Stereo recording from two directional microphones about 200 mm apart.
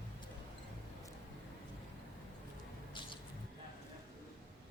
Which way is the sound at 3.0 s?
25° left (ahead or behind).